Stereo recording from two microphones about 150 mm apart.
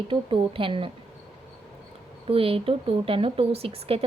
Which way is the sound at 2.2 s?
40° right (ahead or behind).